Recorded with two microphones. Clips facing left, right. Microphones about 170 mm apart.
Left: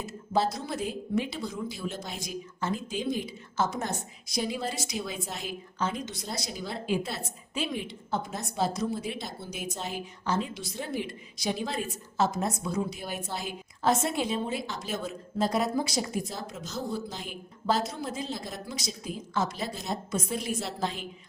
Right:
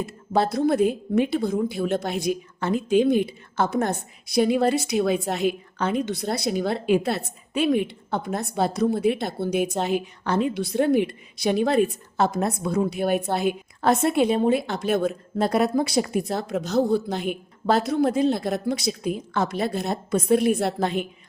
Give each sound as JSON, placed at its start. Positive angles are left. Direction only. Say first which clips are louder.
{"t": 0.0, "sound": "a woman's voice", "louder": "right 5 dB", "side_deg": -60}